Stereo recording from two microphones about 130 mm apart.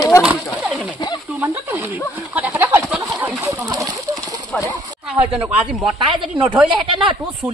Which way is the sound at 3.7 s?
30° right (ahead or behind).